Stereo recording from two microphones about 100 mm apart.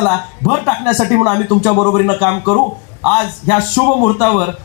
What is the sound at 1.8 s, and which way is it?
Speech, 20° left (ahead or behind).